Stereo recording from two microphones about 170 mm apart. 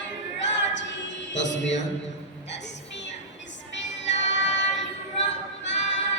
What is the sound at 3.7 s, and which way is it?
Music, 90° left.